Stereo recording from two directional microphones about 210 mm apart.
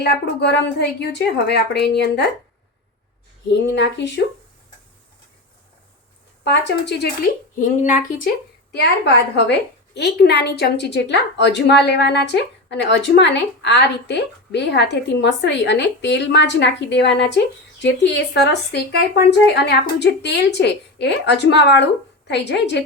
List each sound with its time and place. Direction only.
0.3 s speech: 55° left (ahead or behind)
3.4 s a woman's voice: 55° left (ahead or behind)
6.4 s speech: 55° left (ahead or behind); by 8.3 s 40° left (ahead or behind)
8.7 s a woman's voice: 55° left (ahead or behind)